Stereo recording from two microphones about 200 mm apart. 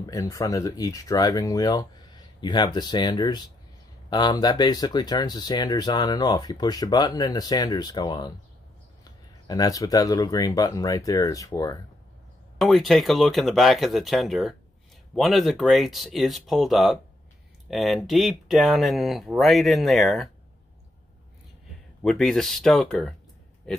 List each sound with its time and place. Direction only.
0.0 s speech: 15° left (ahead or behind)
12.5 s speech: centre (ahead or behind)
22.0 s speech: centre (ahead or behind)